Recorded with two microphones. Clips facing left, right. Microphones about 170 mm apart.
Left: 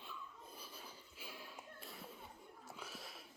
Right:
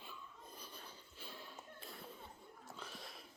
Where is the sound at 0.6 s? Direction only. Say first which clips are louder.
Even; 5° left (ahead or behind).